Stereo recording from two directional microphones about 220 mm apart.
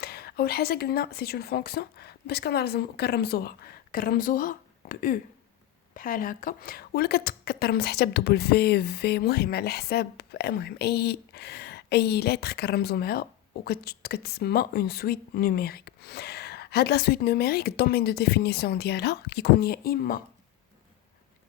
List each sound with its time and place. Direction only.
0.0 s a woman's voice: 45° left (ahead or behind)